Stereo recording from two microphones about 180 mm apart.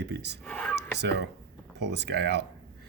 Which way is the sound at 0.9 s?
70° right (ahead or behind).